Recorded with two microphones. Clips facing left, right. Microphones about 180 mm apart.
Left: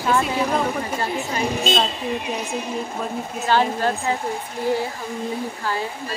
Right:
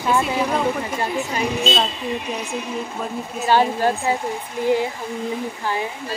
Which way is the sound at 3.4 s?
15° right (ahead or behind).